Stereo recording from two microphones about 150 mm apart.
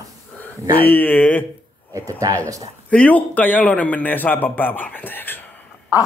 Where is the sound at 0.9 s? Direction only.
10° left (ahead or behind).